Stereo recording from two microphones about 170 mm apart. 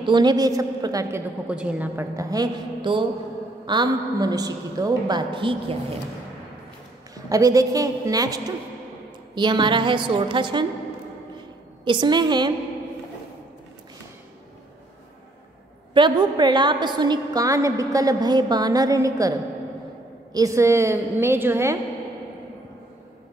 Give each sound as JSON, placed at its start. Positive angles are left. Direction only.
{"t": 0.0, "sound": "a woman's voice", "side_deg": -25}
{"t": 1.5, "sound": "a woman's voice", "side_deg": -5}
{"t": 7.2, "sound": "a woman's voice", "side_deg": -20}
{"t": 11.3, "sound": "a sound", "side_deg": -25}
{"t": 15.9, "sound": "a woman's voice", "side_deg": -25}
{"t": 20.3, "sound": "a woman's voice", "side_deg": -20}